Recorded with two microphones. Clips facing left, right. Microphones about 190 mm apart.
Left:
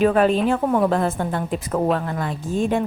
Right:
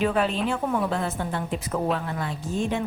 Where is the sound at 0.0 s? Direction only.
50° left (ahead or behind).